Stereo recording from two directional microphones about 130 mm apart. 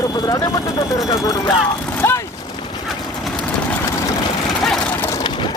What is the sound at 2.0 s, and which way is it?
Boat, 15° left (ahead or behind).